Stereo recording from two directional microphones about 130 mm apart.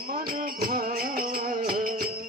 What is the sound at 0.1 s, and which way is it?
Music, 90° right.